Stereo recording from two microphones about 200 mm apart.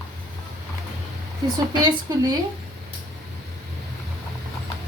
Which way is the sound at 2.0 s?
20° right (ahead or behind).